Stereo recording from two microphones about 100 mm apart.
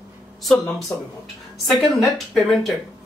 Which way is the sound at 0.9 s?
30° left (ahead or behind).